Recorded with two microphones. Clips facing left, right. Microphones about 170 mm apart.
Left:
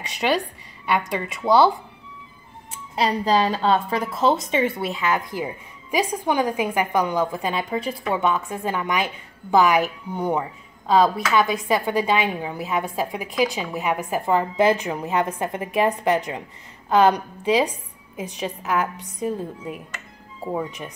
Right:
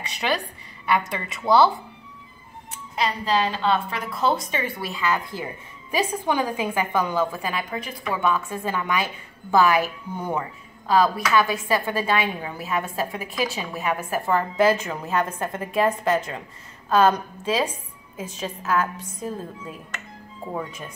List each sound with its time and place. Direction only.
0.9 s speech: 15° left (ahead or behind)
3.0 s a woman's voice: 40° left (ahead or behind)
4.1 s speech: 25° left (ahead or behind)